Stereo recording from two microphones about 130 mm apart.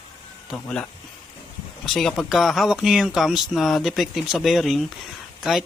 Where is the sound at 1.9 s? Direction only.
Centre (ahead or behind).